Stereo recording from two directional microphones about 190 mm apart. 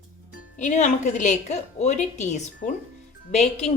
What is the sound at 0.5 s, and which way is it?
A woman's voice, 40° left (ahead or behind).